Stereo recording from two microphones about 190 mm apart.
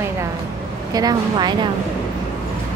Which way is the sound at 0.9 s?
20° right (ahead or behind).